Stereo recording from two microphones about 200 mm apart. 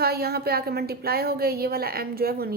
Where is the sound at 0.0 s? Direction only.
50° right (ahead or behind).